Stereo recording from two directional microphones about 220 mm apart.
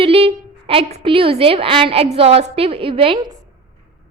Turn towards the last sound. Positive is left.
turn(degrees=-25)  # may be behind; listen again after turning